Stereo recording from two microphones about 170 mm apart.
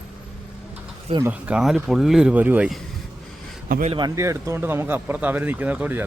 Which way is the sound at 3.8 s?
30° right (ahead or behind).